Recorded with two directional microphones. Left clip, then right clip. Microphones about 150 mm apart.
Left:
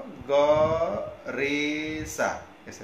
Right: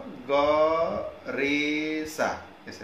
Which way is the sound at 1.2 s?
15° left (ahead or behind).